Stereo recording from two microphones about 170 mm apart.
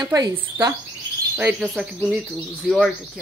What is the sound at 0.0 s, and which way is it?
Speech, 20° right (ahead or behind).